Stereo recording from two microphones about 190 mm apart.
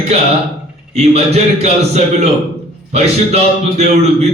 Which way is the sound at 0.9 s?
35° right (ahead or behind).